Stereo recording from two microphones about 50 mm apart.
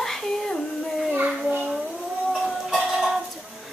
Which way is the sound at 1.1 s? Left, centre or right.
Right.